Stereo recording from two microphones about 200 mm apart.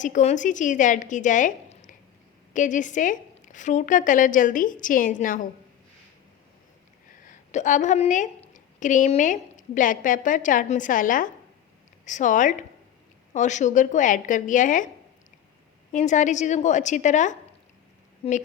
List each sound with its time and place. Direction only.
0.0 s speech: 35° left (ahead or behind)
7.3 s a woman's voice: 40° left (ahead or behind)
15.9 s speech: 35° left (ahead or behind)